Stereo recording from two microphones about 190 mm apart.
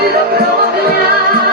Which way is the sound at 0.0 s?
55° right (ahead or behind).